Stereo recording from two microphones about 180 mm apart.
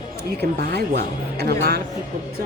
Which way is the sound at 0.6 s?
65° right (ahead or behind).